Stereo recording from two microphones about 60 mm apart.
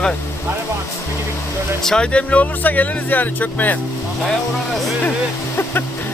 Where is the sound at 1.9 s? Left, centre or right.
Centre.